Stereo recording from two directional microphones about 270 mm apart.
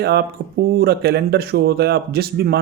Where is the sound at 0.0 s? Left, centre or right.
Right.